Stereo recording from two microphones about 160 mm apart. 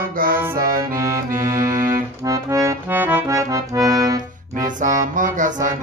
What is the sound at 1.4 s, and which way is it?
Accordion, 20° right (ahead or behind).